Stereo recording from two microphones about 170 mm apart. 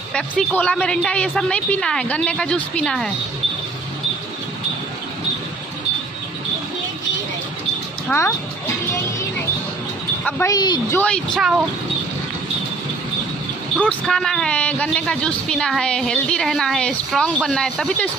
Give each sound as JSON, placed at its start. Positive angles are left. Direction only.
{"t": 0.1, "sound": "a woman's voice", "side_deg": 5}
{"t": 8.1, "sound": "music", "side_deg": 10}
{"t": 10.4, "sound": "a woman's voice", "side_deg": 25}
{"t": 11.0, "sound": "a woman's voice", "side_deg": 5}
{"t": 13.8, "sound": "a woman's voice", "side_deg": 5}